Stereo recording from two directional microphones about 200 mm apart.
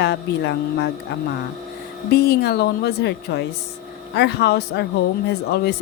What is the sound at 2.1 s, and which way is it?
A woman's voice, 55° left (ahead or behind).